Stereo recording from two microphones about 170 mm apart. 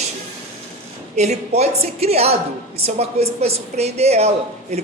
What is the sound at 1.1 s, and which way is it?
Speech, 40° right (ahead or behind).